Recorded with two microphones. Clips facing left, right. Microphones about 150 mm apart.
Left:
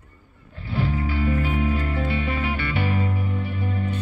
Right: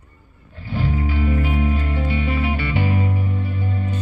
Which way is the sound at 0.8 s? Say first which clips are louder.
Right 2 dB; 20° right (ahead or behind).